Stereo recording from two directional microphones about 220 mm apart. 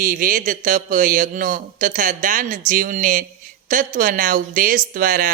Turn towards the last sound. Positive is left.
turn(degrees=-40)  # may be behind; listen again after turning